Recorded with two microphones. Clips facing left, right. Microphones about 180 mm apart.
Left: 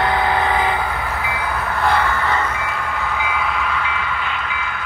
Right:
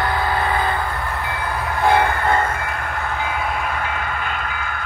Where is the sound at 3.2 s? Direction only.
45° right (ahead or behind).